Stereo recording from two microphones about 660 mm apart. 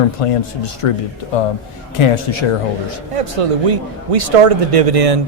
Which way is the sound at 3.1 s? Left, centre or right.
Right.